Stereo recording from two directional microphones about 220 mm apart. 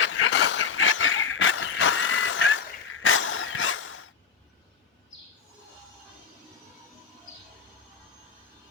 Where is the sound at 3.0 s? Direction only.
65° left (ahead or behind).